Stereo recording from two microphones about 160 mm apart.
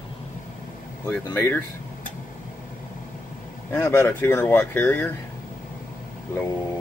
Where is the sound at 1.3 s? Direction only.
15° left (ahead or behind).